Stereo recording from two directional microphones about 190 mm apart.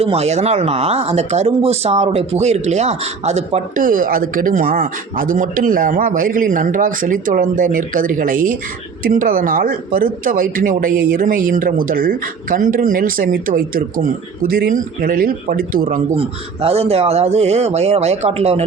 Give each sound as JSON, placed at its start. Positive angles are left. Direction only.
{"t": 0.0, "sound": "speech", "side_deg": -35}
{"t": 16.1, "sound": "speech", "side_deg": -30}